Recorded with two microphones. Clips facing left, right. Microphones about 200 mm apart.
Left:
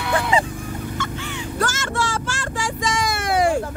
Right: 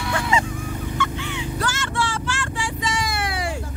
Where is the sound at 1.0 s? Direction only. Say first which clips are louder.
Right 1 dB; 45° left (ahead or behind).